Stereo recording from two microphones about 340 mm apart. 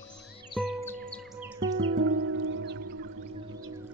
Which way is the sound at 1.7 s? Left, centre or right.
Right.